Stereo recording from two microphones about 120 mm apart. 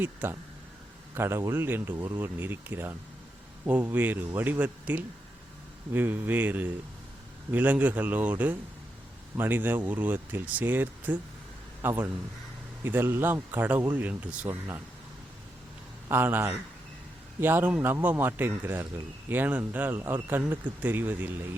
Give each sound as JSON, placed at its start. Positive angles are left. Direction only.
{"t": 0.0, "sound": "speech", "side_deg": -15}
{"t": 16.0, "sound": "speech", "side_deg": -20}